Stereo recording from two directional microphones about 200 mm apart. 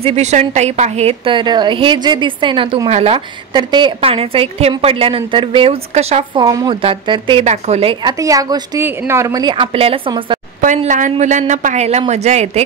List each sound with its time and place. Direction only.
0.0 s a woman's voice: 30° right (ahead or behind)
6.4 s a woman's voice: 20° right (ahead or behind)
10.6 s a woman's voice: 40° right (ahead or behind)